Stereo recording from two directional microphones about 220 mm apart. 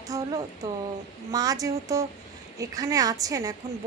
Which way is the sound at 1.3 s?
15° right (ahead or behind).